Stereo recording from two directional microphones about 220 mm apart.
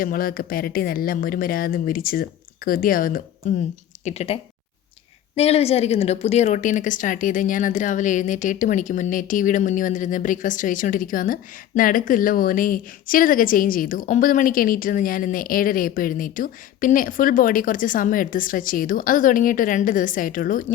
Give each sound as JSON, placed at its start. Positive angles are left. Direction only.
{"t": 0.0, "sound": "a woman's voice", "side_deg": 40}
{"t": 4.0, "sound": "speech", "side_deg": 30}
{"t": 5.4, "sound": "a woman's voice", "side_deg": 30}